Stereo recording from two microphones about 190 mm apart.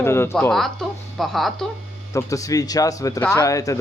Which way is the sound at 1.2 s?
Centre (ahead or behind).